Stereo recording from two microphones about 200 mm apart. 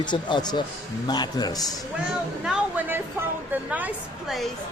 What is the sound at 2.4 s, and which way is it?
A woman's voice, 5° right (ahead or behind).